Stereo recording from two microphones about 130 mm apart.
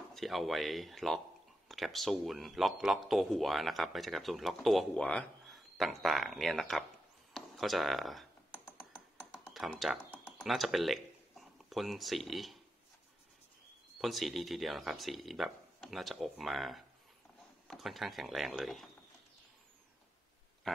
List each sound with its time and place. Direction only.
0.1 s a man's voice: centre (ahead or behind)
9.3 s computer keyboard: centre (ahead or behind)
10.4 s speech: centre (ahead or behind)
14.0 s a man's voice: centre (ahead or behind)
20.7 s a sound: 5° left (ahead or behind)